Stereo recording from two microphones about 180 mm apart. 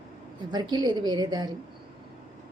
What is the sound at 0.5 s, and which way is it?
A woman's voice, 25° right (ahead or behind).